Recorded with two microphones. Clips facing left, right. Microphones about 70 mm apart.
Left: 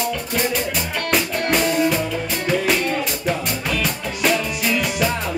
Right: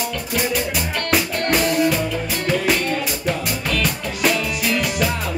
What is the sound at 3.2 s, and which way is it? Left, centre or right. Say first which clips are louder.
Music: even; centre.